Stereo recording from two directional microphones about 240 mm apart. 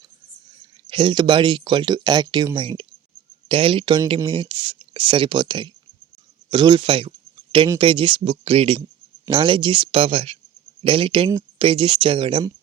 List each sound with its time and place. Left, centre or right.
0.9 s speech: centre